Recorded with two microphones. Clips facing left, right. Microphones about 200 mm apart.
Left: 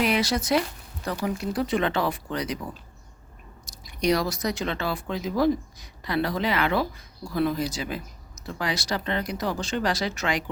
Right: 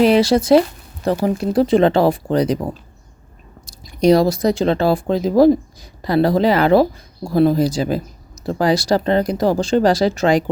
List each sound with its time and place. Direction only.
0.0 s speech: 30° right (ahead or behind)
3.7 s speech: 30° right (ahead or behind)